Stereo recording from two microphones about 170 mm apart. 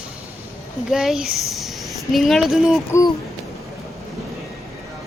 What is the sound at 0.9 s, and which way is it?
Speech, 5° right (ahead or behind).